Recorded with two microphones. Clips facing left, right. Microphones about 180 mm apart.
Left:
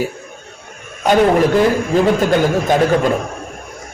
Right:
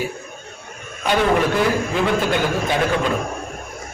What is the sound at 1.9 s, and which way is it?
A man's voice, 40° left (ahead or behind).